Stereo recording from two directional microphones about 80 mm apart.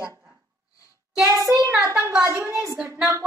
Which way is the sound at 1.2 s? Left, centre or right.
Right.